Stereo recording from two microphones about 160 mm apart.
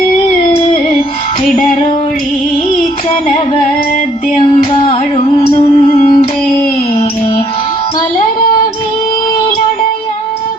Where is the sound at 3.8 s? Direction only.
55° left (ahead or behind).